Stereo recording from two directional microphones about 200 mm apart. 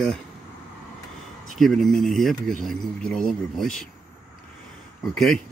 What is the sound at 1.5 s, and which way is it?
Speech, centre (ahead or behind).